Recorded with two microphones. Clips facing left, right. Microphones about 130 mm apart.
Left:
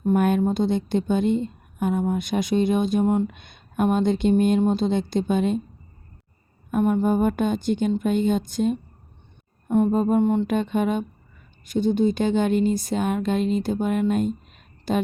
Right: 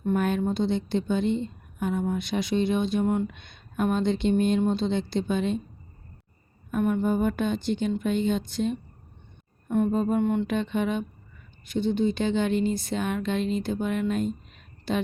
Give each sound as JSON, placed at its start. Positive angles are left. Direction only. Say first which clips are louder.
{"t": 0.0, "sound": "a woman's voice", "louder": "left 5 dB", "side_deg": 45}
{"t": 6.7, "sound": "a woman's voice", "louder": "left 4 dB", "side_deg": 40}